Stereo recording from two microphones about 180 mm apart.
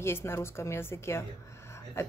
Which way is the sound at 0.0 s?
15° left (ahead or behind).